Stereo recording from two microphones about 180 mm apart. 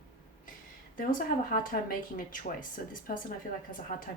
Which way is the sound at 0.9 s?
50° left (ahead or behind).